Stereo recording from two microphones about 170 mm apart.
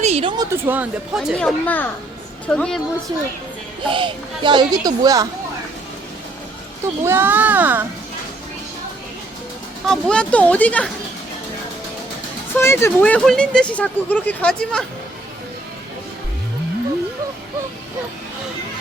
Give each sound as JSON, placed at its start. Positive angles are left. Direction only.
{"t": 0.0, "sound": "a sound", "side_deg": -35}
{"t": 0.5, "sound": "a child's voice", "side_deg": -10}
{"t": 1.4, "sound": "a woman's voice", "side_deg": 5}
{"t": 3.8, "sound": "speech", "side_deg": -30}
{"t": 7.0, "sound": "a child's voice", "side_deg": -15}
{"t": 9.8, "sound": "speech", "side_deg": 5}
{"t": 12.5, "sound": "speech", "side_deg": 15}